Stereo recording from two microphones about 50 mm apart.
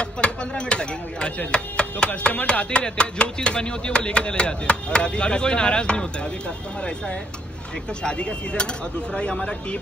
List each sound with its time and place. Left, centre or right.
0.0 s speech: left
8.0 s speech: centre